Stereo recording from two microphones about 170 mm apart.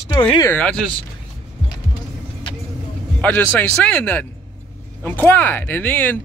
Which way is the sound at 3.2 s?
10° left (ahead or behind).